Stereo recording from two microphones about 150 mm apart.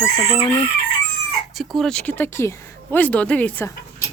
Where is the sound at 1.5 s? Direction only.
Centre (ahead or behind).